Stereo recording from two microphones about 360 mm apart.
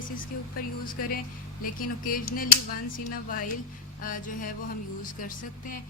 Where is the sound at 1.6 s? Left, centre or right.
Left.